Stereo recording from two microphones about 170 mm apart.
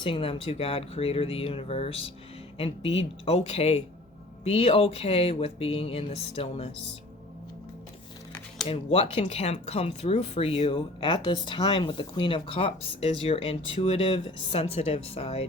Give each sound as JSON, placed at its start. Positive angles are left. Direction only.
{"t": 0.0, "sound": "speech", "side_deg": 30}
{"t": 8.6, "sound": "speech", "side_deg": 35}